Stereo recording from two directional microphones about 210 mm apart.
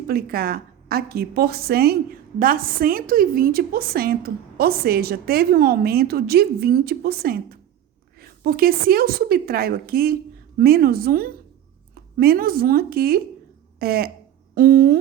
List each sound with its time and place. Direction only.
0.1 s a woman's voice: 45° right (ahead or behind)